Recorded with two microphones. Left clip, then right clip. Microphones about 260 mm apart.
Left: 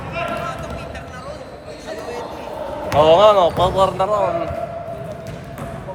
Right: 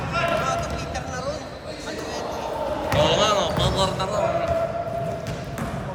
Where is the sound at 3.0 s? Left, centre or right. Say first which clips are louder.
Left 10 dB; centre.